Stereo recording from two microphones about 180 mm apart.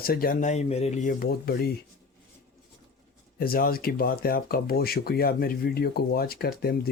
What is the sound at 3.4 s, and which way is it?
Speech, 55° left (ahead or behind).